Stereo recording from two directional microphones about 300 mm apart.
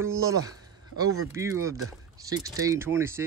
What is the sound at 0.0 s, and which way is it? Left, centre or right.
Speech, centre.